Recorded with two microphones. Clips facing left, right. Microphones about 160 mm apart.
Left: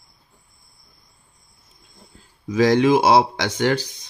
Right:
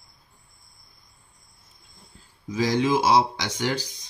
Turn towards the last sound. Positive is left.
turn(degrees=60)  # may be behind; listen again after turning